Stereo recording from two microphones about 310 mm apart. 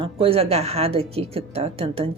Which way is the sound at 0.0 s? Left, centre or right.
Centre.